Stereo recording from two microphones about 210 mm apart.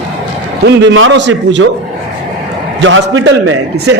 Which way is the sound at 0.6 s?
55° right (ahead or behind).